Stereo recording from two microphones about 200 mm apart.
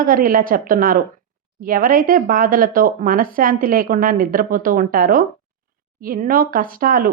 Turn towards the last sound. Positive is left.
turn(degrees=-45)  # may be behind; listen again after turning